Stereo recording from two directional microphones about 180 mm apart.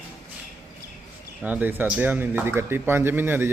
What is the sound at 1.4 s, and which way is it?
Speech, 10° right (ahead or behind).